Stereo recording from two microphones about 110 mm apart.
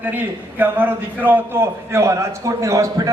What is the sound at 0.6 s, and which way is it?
A man's voice, 20° right (ahead or behind).